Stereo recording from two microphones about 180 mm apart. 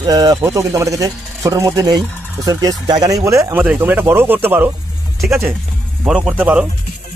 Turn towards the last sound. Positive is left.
turn(degrees=-10)  # may be behind; listen again after turning